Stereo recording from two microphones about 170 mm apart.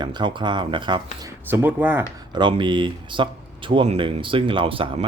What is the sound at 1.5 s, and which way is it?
Speech, 10° right (ahead or behind).